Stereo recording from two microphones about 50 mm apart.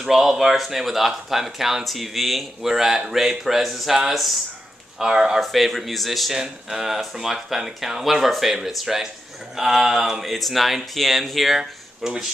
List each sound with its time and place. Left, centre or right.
0.0 s speech: centre
4.9 s speech: centre
5.4 s speech: centre